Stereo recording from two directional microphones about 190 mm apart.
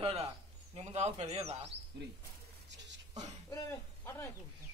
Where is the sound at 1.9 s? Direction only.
65° right (ahead or behind).